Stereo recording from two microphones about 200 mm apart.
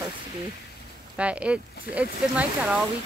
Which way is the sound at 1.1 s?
5° right (ahead or behind).